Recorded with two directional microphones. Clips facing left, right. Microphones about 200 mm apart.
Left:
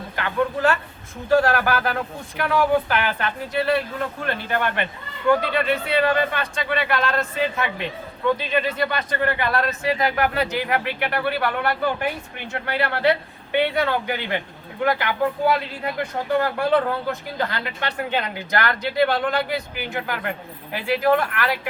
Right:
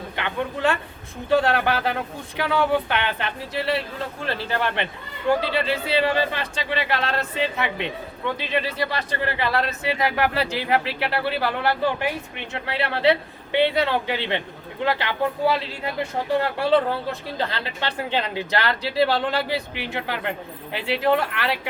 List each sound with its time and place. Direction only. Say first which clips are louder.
0.2 s speech: left 3 dB; 20° right (ahead or behind)
12.8 s speech: right 1 dB; 25° right (ahead or behind)